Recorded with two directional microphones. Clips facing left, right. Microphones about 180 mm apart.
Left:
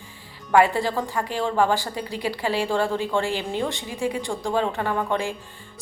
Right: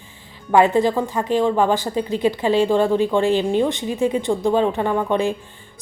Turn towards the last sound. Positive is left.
turn(degrees=-20)  # may be behind; listen again after turning